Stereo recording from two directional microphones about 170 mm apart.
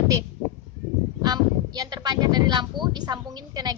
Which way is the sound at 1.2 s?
25° right (ahead or behind).